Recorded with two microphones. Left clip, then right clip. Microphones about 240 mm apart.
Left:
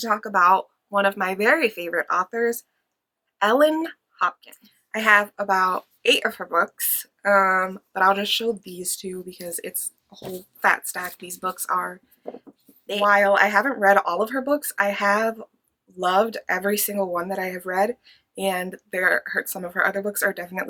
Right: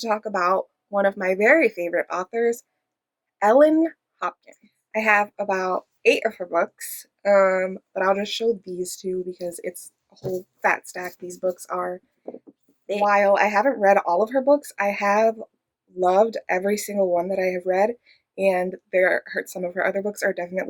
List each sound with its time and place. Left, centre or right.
0.1 s a woman's voice: centre
18.0 s speech: left
18.6 s speech: centre